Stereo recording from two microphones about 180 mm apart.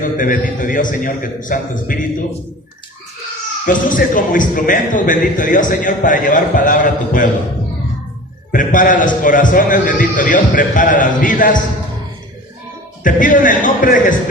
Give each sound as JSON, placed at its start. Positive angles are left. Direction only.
{"t": 0.0, "sound": "a man's voice", "side_deg": 45}
{"t": 3.7, "sound": "a man's voice", "side_deg": 50}
{"t": 8.5, "sound": "a man's voice", "side_deg": 45}
{"t": 13.0, "sound": "a man's voice", "side_deg": 45}